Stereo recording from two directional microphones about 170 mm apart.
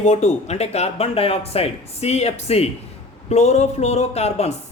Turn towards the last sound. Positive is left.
turn(degrees=40)  # may be behind; listen again after turning